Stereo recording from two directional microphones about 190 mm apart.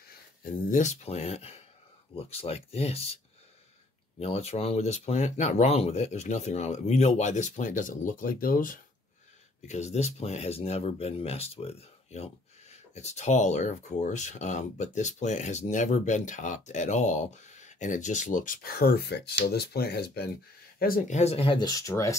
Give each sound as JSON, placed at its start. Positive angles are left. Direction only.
{"t": 0.4, "sound": "speech", "side_deg": 45}
{"t": 4.2, "sound": "speech", "side_deg": 30}
{"t": 9.7, "sound": "speech", "side_deg": 35}
{"t": 21.2, "sound": "speech", "side_deg": 30}